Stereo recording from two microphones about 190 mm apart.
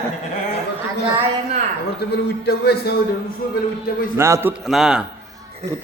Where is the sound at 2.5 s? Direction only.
55° left (ahead or behind).